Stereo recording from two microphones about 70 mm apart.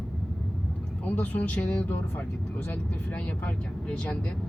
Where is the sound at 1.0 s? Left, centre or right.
Left.